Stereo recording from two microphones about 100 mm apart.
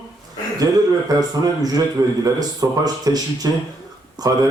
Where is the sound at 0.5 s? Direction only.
40° right (ahead or behind).